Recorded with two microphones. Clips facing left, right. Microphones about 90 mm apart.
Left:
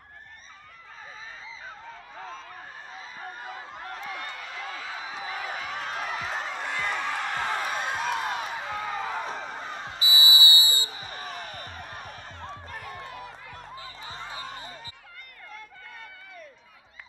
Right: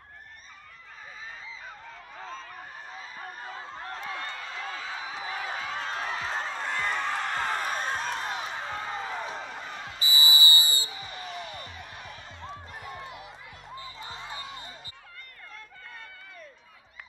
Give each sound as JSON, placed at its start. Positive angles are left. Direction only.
{"t": 3.4, "sound": "a sound", "side_deg": -35}
{"t": 8.5, "sound": "music", "side_deg": -35}
{"t": 9.0, "sound": "music", "side_deg": 40}
{"t": 9.9, "sound": "music", "side_deg": -45}
{"t": 10.9, "sound": "basketball bounce", "side_deg": 45}